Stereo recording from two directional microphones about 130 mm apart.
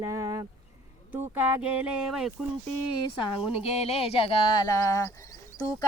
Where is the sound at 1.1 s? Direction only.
15° right (ahead or behind).